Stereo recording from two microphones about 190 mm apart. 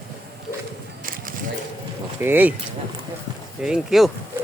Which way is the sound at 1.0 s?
50° right (ahead or behind).